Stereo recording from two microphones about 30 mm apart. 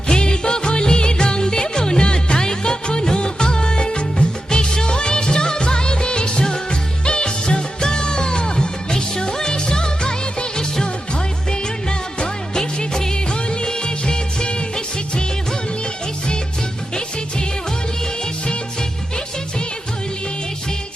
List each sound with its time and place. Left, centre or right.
0.1 s music: left
11.9 s music: left
13.5 s music of bollywood: left